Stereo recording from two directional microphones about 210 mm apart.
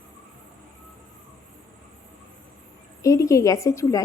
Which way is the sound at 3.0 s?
15° left (ahead or behind).